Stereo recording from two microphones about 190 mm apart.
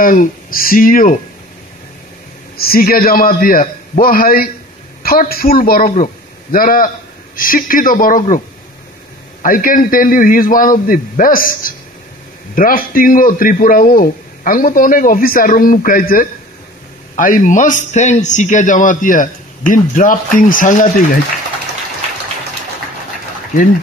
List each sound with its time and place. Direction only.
0.0 s a man's voice: 45° left (ahead or behind)
2.5 s a man's voice: 55° left (ahead or behind)
9.4 s a man's voice: 45° left (ahead or behind)